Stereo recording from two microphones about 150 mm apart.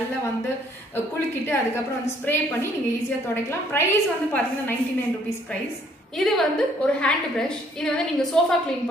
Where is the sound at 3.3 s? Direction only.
15° left (ahead or behind).